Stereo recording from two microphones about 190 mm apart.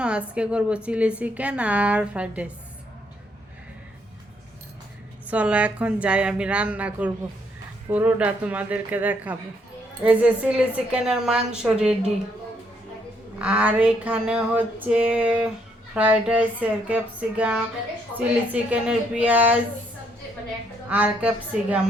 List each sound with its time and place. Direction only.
0.0 s a woman's voice: 5° right (ahead or behind)
5.2 s a woman's voice: 10° right (ahead or behind)
13.4 s a woman's voice: 5° right (ahead or behind)
20.9 s a woman's voice: 5° right (ahead or behind)